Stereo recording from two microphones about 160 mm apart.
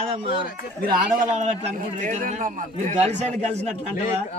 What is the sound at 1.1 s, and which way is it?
A man's voice, 50° right (ahead or behind).